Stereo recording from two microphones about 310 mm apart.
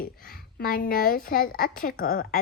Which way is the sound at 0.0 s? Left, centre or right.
Left.